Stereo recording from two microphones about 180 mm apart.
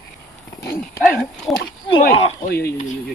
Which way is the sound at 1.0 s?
Centre (ahead or behind).